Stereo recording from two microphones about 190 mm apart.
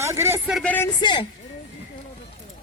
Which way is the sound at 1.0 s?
25° left (ahead or behind).